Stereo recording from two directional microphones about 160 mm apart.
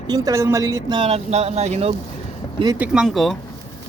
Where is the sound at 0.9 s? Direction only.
35° right (ahead or behind).